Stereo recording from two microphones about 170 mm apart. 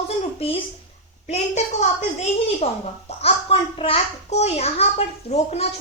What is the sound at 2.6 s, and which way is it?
A child's voice, 35° left (ahead or behind).